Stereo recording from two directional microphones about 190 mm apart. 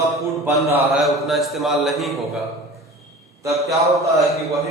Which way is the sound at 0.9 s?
Centre (ahead or behind).